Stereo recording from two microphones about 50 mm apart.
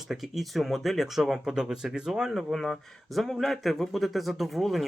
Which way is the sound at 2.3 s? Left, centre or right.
Centre.